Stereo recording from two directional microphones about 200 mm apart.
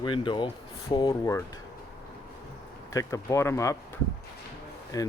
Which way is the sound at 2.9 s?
10° left (ahead or behind).